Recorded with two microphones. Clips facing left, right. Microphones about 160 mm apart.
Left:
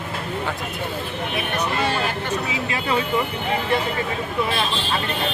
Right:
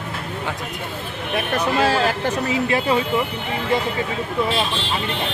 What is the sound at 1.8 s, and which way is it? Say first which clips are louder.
Speech: right 5 dB; 90° right.